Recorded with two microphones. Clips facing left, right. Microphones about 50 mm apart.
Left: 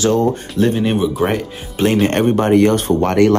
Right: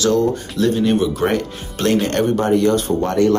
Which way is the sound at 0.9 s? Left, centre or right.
Centre.